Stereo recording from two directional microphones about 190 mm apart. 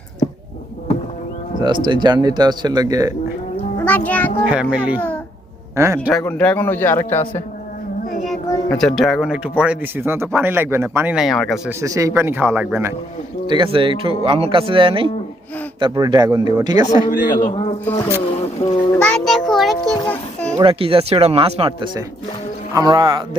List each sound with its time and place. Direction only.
1.6 s speech: 25° right (ahead or behind)
3.8 s a man's voice: 10° left (ahead or behind)
4.4 s a man's voice: 5° right (ahead or behind)
6.2 s a man's voice: 10° left (ahead or behind)
8.4 s a sound: 15° left (ahead or behind)
8.8 s speech: centre (ahead or behind)
11.8 s a man's voice: 15° right (ahead or behind)
13.5 s speech: 25° right (ahead or behind)
17.4 s speech: 30° left (ahead or behind)
17.8 s a man's voice: 10° left (ahead or behind)
18.6 s a sound: 25° left (ahead or behind)
18.9 s a sound: 5° left (ahead or behind)
20.6 s speech: 30° right (ahead or behind)